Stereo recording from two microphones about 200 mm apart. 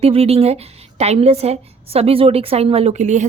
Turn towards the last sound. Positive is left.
turn(degrees=-35)  # may be behind; listen again after turning